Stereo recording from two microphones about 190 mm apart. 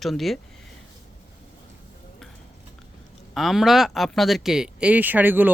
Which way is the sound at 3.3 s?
Centre (ahead or behind).